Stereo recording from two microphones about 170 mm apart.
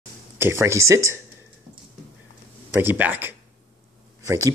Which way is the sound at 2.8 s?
10° right (ahead or behind).